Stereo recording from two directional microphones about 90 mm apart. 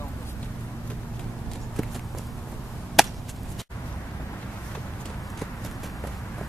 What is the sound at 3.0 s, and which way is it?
Chop, centre (ahead or behind).